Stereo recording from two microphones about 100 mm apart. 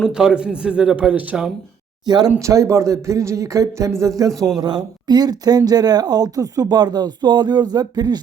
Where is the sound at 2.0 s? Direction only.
45° right (ahead or behind).